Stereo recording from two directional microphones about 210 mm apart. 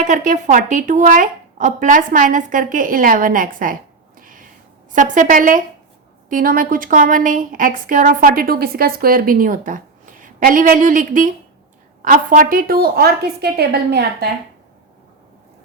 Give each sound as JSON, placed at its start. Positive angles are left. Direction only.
{"t": 0.0, "sound": "speech", "side_deg": -35}
{"t": 4.2, "sound": "cat", "side_deg": -40}
{"t": 4.9, "sound": "a woman's voice", "side_deg": -40}